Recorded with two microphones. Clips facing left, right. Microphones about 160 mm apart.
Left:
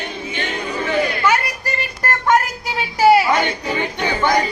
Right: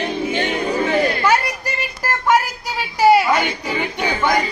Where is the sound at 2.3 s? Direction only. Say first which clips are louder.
Even; centre (ahead or behind).